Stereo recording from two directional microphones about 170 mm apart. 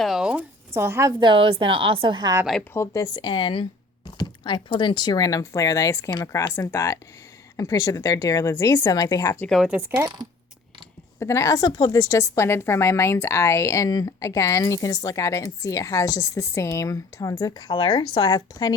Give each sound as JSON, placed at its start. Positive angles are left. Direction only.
{"t": 0.0, "sound": "speech", "side_deg": 0}
{"t": 0.7, "sound": "speech", "side_deg": -15}
{"t": 1.2, "sound": "a woman's voice", "side_deg": -30}
{"t": 2.7, "sound": "speech", "side_deg": 20}
{"t": 9.5, "sound": "speech", "side_deg": -5}
{"t": 11.2, "sound": "a woman's voice", "side_deg": 15}